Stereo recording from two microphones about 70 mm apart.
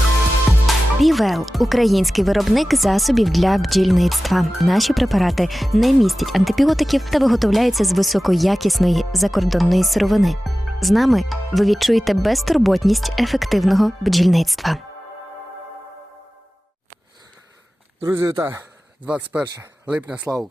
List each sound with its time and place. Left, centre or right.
0.7 s speech: centre
18.1 s speech: right
19.0 s speech: centre
20.3 s speech: centre